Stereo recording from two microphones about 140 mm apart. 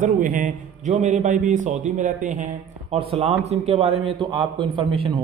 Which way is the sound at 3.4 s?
45° right (ahead or behind).